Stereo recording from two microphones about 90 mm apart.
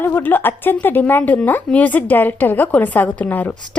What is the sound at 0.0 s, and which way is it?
Speech, 20° left (ahead or behind).